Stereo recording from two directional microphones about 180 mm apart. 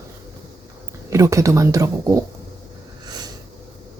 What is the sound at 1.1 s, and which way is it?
Speech, 15° right (ahead or behind).